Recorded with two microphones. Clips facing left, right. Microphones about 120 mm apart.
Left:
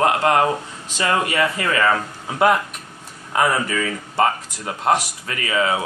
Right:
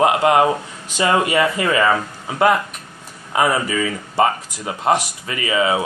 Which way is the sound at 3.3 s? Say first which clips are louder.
Right 1 dB; 10° right (ahead or behind).